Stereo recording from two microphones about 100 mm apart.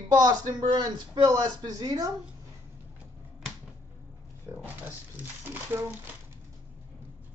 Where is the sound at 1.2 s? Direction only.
35° right (ahead or behind).